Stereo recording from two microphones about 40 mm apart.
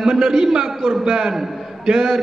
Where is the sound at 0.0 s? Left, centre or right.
Centre.